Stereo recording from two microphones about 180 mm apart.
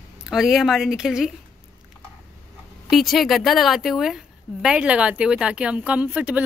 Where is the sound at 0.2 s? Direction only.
Centre (ahead or behind).